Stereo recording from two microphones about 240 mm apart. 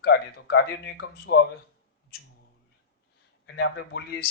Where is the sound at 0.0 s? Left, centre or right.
Left.